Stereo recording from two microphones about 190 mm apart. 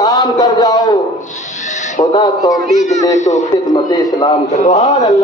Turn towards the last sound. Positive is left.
turn(degrees=20)  # may be behind; listen again after turning